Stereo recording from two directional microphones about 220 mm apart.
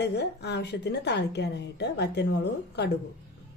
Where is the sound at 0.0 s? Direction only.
50° left (ahead or behind).